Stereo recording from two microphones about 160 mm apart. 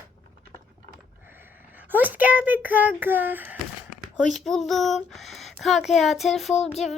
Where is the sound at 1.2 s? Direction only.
15° right (ahead or behind).